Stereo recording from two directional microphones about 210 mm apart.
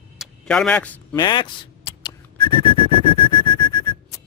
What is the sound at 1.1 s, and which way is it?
Whistling, 20° left (ahead or behind).